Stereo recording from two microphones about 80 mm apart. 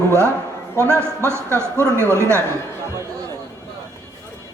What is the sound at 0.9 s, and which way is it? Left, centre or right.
A man's voice, right.